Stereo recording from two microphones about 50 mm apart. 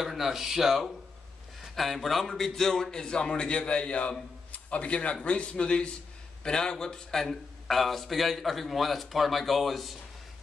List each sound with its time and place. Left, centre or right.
0.0 s a man's voice: centre; by 4.1 s left
4.5 s a sound: left
5.2 s a man's voice: left; by 9.9 s centre